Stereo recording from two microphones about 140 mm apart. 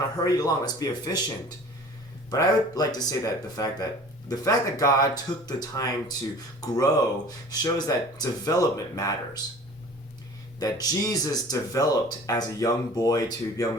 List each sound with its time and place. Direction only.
0.3 s speech: 25° left (ahead or behind)
10.6 s speech: 25° left (ahead or behind)